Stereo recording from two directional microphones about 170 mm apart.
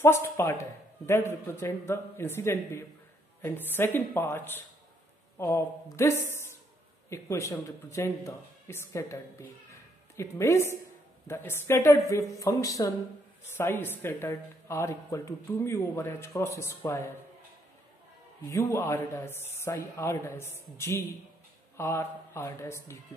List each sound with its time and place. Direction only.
0.0 s speech: 15° left (ahead or behind)
18.5 s speech: 15° left (ahead or behind)